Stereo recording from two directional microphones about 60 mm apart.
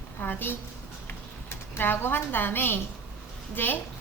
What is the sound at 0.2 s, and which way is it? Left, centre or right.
A woman's voice, left.